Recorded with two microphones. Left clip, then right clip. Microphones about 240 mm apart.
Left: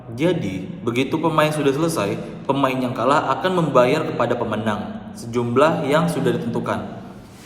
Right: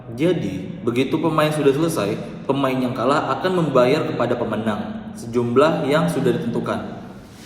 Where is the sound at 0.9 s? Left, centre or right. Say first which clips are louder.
Even; left.